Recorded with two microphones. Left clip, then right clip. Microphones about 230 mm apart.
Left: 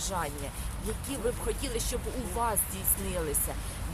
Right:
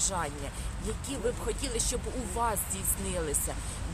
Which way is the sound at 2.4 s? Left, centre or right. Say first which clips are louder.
Even; centre.